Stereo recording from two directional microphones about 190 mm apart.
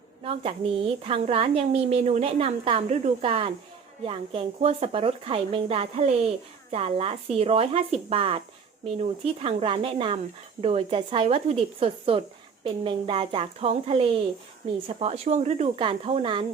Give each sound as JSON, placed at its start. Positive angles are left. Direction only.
{"t": 0.2, "sound": "speech", "side_deg": -30}